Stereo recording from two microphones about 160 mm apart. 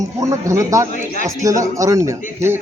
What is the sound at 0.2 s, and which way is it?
Speech, 20° right (ahead or behind).